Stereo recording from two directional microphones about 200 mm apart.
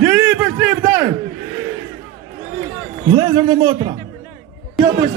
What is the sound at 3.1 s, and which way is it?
Speech, 25° right (ahead or behind).